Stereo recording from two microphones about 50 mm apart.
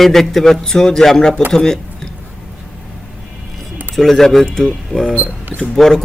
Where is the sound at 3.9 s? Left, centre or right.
Centre.